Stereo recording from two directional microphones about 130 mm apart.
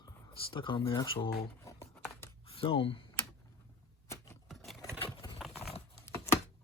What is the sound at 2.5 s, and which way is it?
Speech, 45° left (ahead or behind).